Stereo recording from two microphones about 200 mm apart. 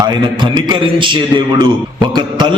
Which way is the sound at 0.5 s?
25° right (ahead or behind).